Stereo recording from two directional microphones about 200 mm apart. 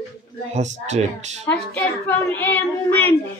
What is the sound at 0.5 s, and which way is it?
Speech, 35° right (ahead or behind).